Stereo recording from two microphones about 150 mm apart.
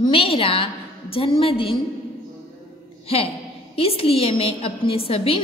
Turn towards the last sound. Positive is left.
turn(degrees=40)  # may be behind; listen again after turning